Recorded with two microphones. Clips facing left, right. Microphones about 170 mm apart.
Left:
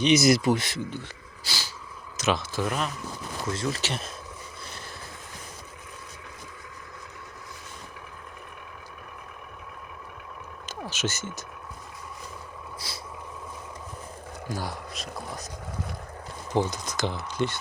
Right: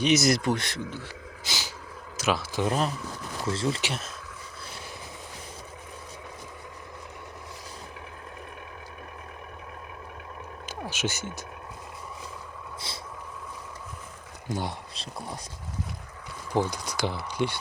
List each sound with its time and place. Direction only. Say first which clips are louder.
0.0 s speech: left 3 dB; centre (ahead or behind)
1.5 s speech: even; 15° right (ahead or behind)
2.6 s speech: right 5 dB; 35° right (ahead or behind)
10.7 s speech: even; 15° right (ahead or behind)
12.9 s speech: right 1 dB; 25° right (ahead or behind)
14.5 s speech: right 2 dB; 25° right (ahead or behind)
16.6 s speech: even; 10° right (ahead or behind)